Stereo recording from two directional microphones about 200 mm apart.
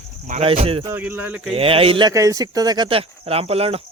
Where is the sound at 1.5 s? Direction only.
30° right (ahead or behind).